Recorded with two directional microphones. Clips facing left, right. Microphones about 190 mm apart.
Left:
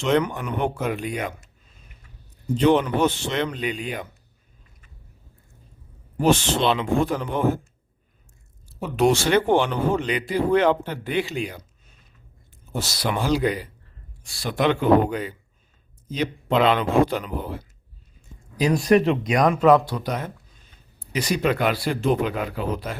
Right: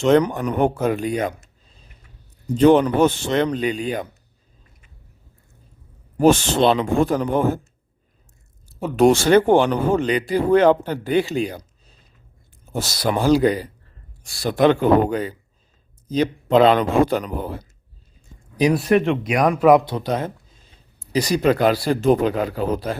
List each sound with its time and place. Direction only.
0.0 s speech: 40° right (ahead or behind)
2.6 s speech: 45° right (ahead or behind)
6.1 s speech: 45° right (ahead or behind)
8.7 s speech: 45° right (ahead or behind)
18.7 s speech: 5° right (ahead or behind); by 23.0 s 35° right (ahead or behind)